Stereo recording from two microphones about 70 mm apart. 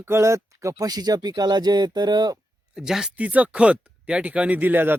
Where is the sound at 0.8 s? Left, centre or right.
Right.